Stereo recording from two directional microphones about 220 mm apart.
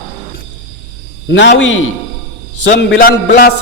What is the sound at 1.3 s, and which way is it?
A man's voice, 55° left (ahead or behind).